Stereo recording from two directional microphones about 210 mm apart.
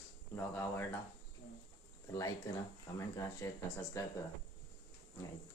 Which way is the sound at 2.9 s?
15° left (ahead or behind).